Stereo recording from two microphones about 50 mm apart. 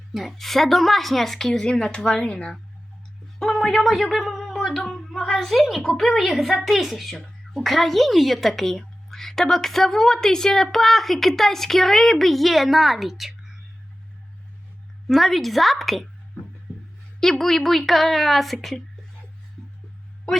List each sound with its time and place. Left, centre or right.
0.1 s speech: centre
3.3 s speech: centre
15.0 s speech: centre
17.2 s speech: centre